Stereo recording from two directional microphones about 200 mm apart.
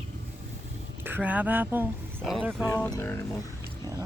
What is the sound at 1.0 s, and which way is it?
Speech, 10° right (ahead or behind).